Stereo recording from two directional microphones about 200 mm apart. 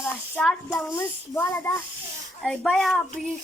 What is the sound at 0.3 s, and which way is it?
Speech, centre (ahead or behind).